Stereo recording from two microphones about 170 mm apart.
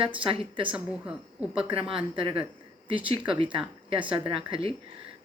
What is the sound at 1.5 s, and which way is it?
Speech, 30° right (ahead or behind).